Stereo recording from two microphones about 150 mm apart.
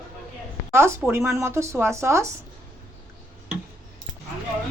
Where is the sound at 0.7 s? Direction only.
15° right (ahead or behind).